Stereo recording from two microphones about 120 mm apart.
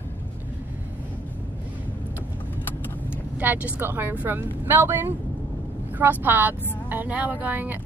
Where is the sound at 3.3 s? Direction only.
15° right (ahead or behind).